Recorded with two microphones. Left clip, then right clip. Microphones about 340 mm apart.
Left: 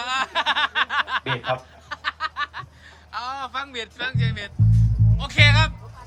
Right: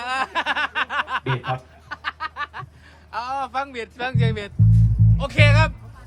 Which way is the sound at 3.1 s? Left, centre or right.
Centre.